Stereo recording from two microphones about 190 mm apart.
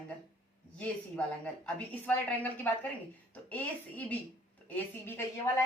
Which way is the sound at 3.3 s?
10° left (ahead or behind).